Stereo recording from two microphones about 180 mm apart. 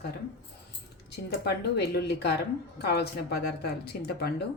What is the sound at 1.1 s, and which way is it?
Speech, 65° left (ahead or behind).